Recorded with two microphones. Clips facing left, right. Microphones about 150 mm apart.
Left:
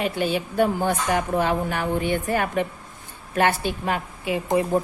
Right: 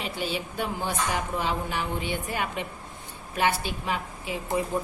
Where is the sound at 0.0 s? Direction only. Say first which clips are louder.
Left 7 dB; 55° left (ahead or behind).